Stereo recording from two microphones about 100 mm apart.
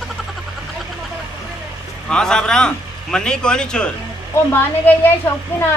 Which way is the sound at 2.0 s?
5° left (ahead or behind).